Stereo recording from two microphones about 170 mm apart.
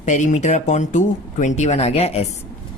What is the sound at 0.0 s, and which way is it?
Speech, 45° left (ahead or behind).